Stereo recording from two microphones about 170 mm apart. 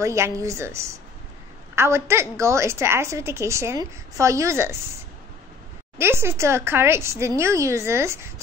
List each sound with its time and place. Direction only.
0.0 s a woman's voice: 15° right (ahead or behind)
5.9 s a woman's voice: 15° right (ahead or behind)